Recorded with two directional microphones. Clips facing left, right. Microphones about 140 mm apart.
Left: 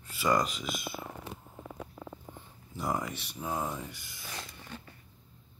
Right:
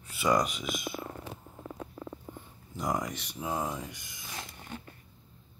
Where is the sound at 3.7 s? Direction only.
15° right (ahead or behind).